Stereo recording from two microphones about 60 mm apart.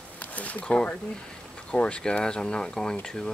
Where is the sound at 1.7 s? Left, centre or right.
Centre.